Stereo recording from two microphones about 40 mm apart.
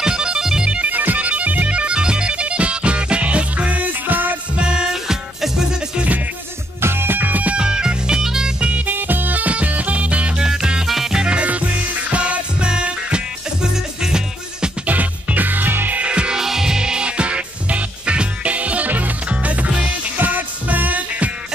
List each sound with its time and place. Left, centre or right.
0.0 s music: centre
0.8 s music: right
4.6 s music: right
6.8 s music: right
7.2 s music: right
7.5 s music: centre
8.8 s music: right
10.4 s music: centre
11.3 s music: right; by 14.7 s centre
14.9 s music: right
16.0 s music: right
16.3 s music: centre; by 19.7 s right
20.2 s music: right